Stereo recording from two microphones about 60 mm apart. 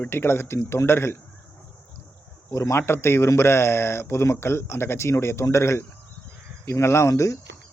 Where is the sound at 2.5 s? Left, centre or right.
Left.